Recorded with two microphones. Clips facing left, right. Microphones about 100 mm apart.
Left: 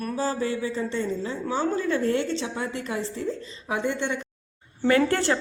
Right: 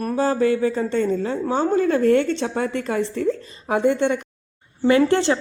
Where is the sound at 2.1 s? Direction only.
60° right (ahead or behind).